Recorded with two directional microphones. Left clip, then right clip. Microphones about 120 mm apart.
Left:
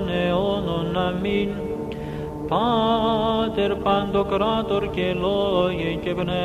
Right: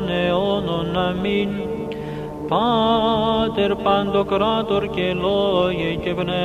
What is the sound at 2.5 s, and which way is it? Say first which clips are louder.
Music: right 3 dB; 40° right (ahead or behind).